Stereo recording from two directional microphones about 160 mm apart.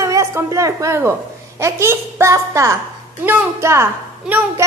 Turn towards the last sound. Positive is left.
turn(degrees=-15)  # may be behind; listen again after turning